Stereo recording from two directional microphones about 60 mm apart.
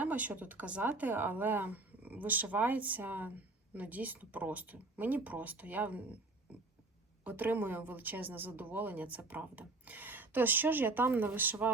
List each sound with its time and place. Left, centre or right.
0.0 s speech: right
7.3 s speech: right